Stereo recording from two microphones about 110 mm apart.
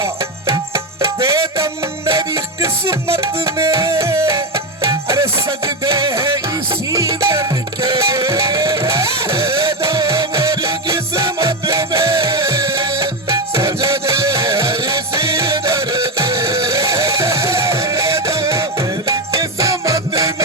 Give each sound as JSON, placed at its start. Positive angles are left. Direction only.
{"t": 0.0, "sound": "music", "side_deg": -25}